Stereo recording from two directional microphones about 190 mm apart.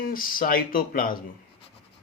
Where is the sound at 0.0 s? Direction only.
50° left (ahead or behind).